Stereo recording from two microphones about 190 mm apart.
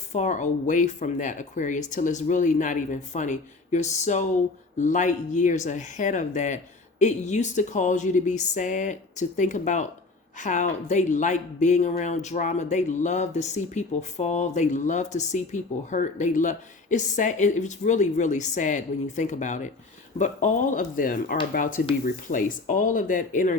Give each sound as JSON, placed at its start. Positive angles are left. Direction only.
{"t": 0.1, "sound": "speech", "side_deg": 40}